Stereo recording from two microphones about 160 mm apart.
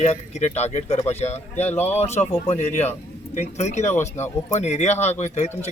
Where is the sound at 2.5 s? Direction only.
45° left (ahead or behind).